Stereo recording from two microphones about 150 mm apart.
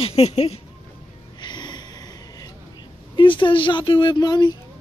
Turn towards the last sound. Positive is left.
turn(degrees=25)  # may be behind; listen again after turning